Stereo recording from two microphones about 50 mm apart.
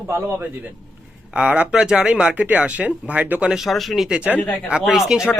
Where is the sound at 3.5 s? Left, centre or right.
Centre.